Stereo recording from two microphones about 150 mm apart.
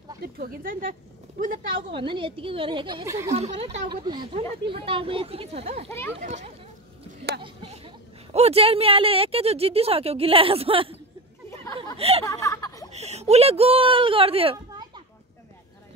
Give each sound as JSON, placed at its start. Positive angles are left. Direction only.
{"t": 0.2, "sound": "speech", "side_deg": -70}
{"t": 1.7, "sound": "speech", "side_deg": -35}
{"t": 3.1, "sound": "speech", "side_deg": -20}
{"t": 3.3, "sound": "speech", "side_deg": -45}
{"t": 3.9, "sound": "speech", "side_deg": -30}
{"t": 5.9, "sound": "a child's voice", "side_deg": 15}
{"t": 6.2, "sound": "speech", "side_deg": -50}
{"t": 7.6, "sound": "speech", "side_deg": -45}
{"t": 12.0, "sound": "speech", "side_deg": -40}
{"t": 12.3, "sound": "a sound", "side_deg": 20}
{"t": 12.9, "sound": "speech", "side_deg": -45}